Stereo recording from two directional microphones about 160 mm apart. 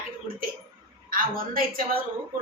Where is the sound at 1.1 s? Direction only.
60° right (ahead or behind).